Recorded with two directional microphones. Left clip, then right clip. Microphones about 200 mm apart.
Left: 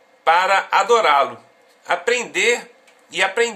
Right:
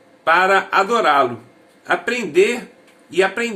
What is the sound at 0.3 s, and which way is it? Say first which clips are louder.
Speech: right 1 dB; 50° left (ahead or behind).